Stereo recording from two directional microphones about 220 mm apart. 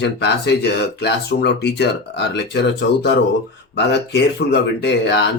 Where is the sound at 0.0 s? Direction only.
50° left (ahead or behind).